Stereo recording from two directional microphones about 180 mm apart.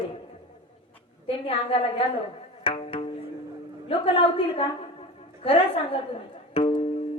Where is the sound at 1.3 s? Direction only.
30° left (ahead or behind).